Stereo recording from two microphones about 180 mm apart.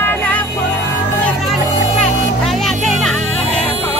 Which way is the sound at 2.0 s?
Centre (ahead or behind).